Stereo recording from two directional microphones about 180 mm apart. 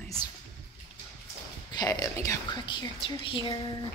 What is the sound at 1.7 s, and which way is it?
Speech, 20° left (ahead or behind).